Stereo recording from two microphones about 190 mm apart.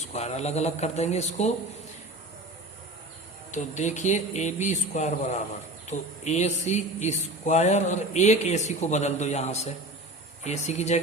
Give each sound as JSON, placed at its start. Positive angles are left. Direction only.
{"t": 0.0, "sound": "speech", "side_deg": 35}
{"t": 3.5, "sound": "speech", "side_deg": 40}